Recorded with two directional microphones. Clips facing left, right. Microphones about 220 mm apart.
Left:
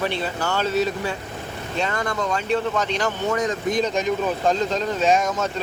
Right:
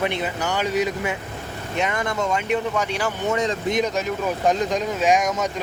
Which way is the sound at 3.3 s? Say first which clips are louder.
Right 1 dB; 25° right (ahead or behind).